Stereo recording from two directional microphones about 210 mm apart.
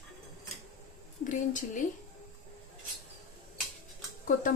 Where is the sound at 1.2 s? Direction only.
40° left (ahead or behind).